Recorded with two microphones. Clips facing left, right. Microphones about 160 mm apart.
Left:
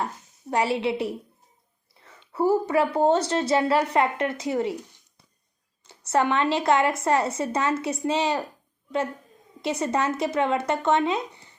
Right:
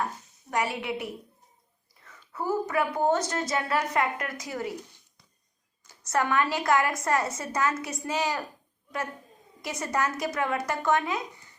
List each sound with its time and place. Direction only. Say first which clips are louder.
0.5 s a woman's voice: left 6 dB; 30° left (ahead or behind)
5.9 s a woman's voice: left 4 dB; 25° left (ahead or behind)
9.6 s a woman's voice: left 5 dB; 25° left (ahead or behind)